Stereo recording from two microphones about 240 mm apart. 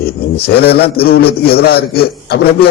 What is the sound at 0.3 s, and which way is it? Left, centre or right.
A man's voice, left.